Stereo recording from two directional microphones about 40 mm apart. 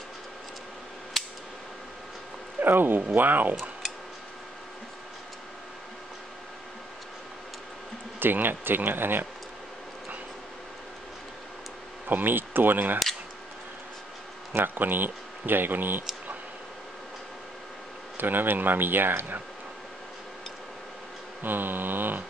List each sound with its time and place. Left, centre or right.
1.1 s a sound: centre
2.6 s speech: right
3.2 s speech: right
8.2 s speech: right
12.1 s speech: right
14.5 s speech: right
18.1 s speech: right
21.4 s speech: right